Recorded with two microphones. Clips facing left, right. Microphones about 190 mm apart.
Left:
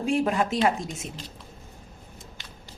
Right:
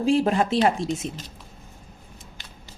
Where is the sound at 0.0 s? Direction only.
30° right (ahead or behind).